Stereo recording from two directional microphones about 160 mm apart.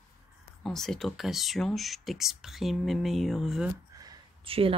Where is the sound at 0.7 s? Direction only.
Centre (ahead or behind).